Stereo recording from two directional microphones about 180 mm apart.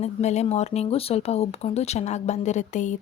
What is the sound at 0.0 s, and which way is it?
A woman's voice, 40° left (ahead or behind).